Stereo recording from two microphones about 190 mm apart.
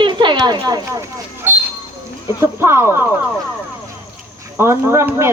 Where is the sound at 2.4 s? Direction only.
15° right (ahead or behind).